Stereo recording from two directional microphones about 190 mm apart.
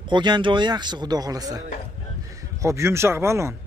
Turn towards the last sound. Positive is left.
turn(degrees=-15)  # may be behind; listen again after turning